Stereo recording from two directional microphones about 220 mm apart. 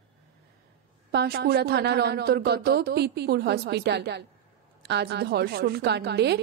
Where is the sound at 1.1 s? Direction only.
45° right (ahead or behind).